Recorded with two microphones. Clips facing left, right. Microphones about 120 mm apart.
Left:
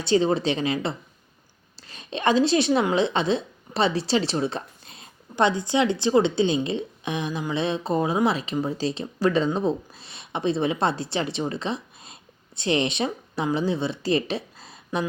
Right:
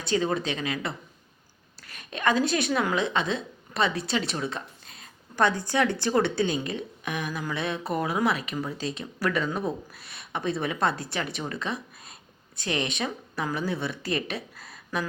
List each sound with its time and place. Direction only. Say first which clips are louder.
0.0 s a woman's voice: left 5 dB; 30° left (ahead or behind)